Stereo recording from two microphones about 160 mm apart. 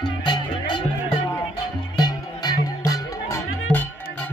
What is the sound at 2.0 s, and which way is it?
Music, 25° left (ahead or behind).